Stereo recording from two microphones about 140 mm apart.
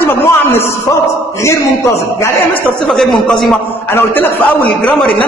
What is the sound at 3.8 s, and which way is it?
A man's voice, 15° left (ahead or behind).